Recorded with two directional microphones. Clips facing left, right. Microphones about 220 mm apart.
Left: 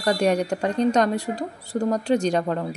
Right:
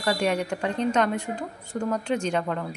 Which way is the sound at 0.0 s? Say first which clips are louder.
Left 4 dB; 40° left (ahead or behind).